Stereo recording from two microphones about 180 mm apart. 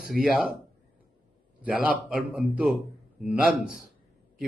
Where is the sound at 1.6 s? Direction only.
10° right (ahead or behind).